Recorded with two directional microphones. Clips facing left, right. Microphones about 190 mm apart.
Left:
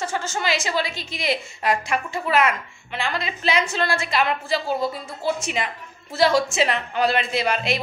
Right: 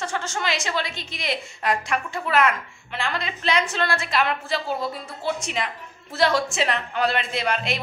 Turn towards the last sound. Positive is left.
turn(degrees=0)  # may be behind; listen again after turning